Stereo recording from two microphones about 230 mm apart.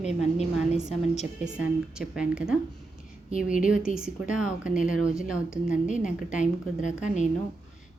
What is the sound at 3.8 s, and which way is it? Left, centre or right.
Speech, centre.